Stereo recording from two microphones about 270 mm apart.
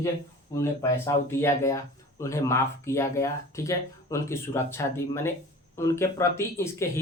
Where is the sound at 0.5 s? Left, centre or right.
Centre.